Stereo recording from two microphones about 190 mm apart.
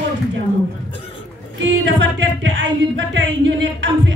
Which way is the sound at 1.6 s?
70° right (ahead or behind).